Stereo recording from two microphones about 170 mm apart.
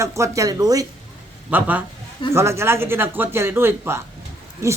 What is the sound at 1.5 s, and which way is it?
Speech, 10° right (ahead or behind).